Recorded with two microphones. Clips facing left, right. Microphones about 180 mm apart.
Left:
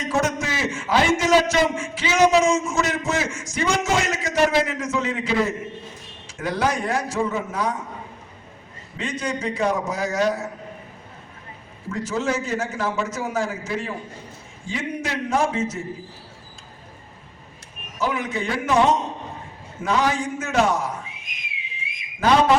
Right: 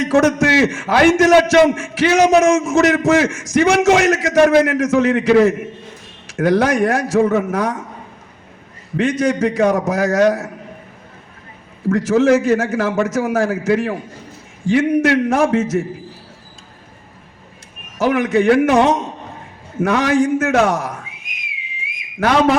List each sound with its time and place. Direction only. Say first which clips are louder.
0.0 s a man's voice: right 10 dB; 75° right (ahead or behind)
9.0 s a man's voice: right 11 dB; 80° right
11.9 s a man's voice: right 12 dB; 85° right
18.0 s a man's voice: right 11 dB; 90° right